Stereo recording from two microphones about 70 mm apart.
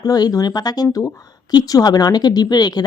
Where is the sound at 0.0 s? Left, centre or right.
Left.